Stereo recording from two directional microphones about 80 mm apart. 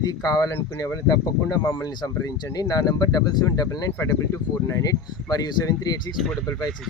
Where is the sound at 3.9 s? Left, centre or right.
Left.